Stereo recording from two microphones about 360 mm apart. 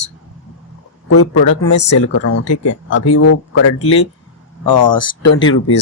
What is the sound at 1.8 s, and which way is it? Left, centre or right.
Speech, left.